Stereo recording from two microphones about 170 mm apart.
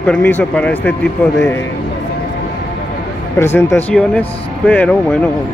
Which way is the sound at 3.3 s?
15° left (ahead or behind).